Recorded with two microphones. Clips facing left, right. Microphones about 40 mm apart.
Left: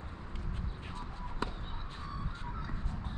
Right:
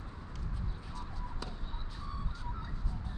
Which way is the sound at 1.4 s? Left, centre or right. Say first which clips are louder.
Left 9 dB; left.